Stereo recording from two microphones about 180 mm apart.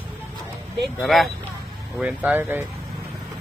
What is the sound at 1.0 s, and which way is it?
Speech, centre (ahead or behind).